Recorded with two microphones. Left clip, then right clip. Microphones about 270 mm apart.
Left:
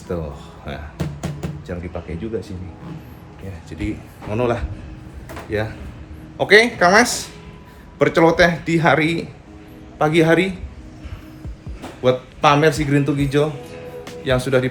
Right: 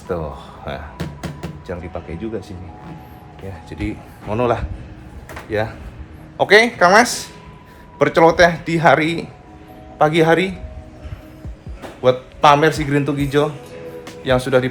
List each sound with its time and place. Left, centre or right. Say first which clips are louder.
0.1 s a man's voice: right 3 dB; centre
0.9 s music: even; centre
1.6 s speech: right 3 dB; centre
3.7 s a man's voice: even; centre
12.0 s a man's voice: right 3 dB; centre